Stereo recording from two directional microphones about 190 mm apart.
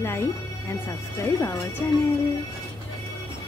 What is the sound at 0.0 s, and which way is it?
Speech, 15° left (ahead or behind).